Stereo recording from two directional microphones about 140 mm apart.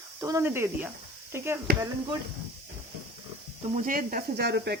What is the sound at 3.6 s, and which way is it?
Speech, 55° right (ahead or behind).